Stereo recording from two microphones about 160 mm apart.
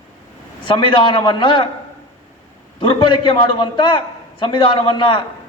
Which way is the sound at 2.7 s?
30° left (ahead or behind).